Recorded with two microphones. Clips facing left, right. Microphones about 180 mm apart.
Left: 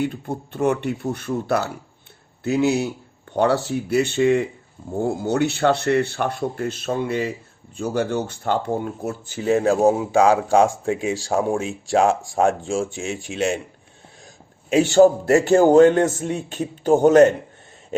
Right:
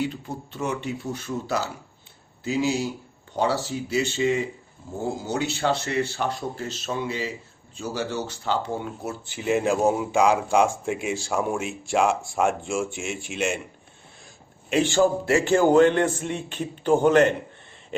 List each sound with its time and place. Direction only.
0.0 s speech: 55° left (ahead or behind); by 9.9 s 35° left (ahead or behind)
11.0 s a man's voice: 35° left (ahead or behind)
14.7 s a man's voice: 45° left (ahead or behind)